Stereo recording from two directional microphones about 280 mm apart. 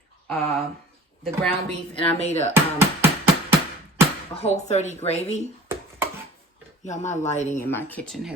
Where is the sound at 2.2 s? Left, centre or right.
Left.